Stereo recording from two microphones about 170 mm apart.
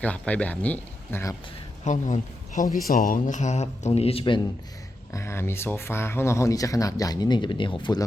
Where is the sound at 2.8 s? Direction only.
60° left (ahead or behind); by 4.4 s 30° left (ahead or behind).